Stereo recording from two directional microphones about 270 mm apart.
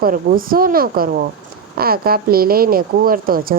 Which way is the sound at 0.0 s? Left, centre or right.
Right.